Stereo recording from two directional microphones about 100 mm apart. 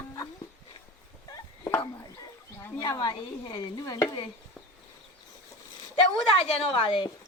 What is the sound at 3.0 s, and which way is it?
A woman's voice, 45° left (ahead or behind).